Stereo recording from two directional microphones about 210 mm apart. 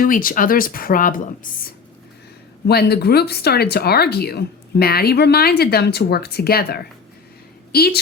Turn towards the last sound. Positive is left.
turn(degrees=50)  # may be behind; listen again after turning